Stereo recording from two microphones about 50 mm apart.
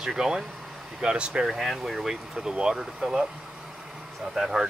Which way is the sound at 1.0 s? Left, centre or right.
Centre.